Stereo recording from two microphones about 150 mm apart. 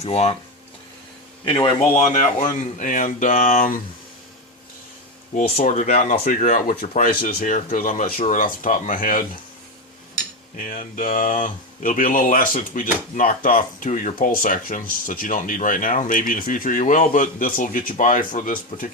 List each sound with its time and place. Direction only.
0.0 s speech: 45° left (ahead or behind)
1.5 s speech: 35° left (ahead or behind)
2.0 s speech: 55° left (ahead or behind)
5.5 s speech: 55° left (ahead or behind)
10.6 s speech: 60° left (ahead or behind)